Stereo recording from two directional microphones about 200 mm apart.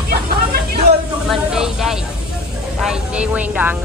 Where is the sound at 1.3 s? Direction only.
Centre (ahead or behind).